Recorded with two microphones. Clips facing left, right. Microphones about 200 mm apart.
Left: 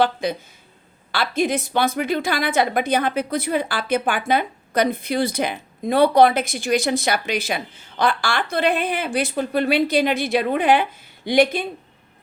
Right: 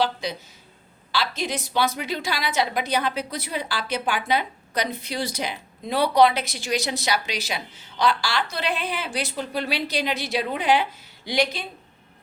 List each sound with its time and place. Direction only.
0.0 s a woman's voice: 55° left (ahead or behind)